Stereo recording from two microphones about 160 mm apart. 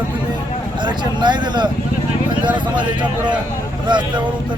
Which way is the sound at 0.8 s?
30° right (ahead or behind).